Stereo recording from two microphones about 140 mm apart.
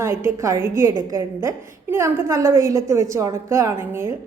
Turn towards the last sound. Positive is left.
turn(degrees=-15)  # may be behind; listen again after turning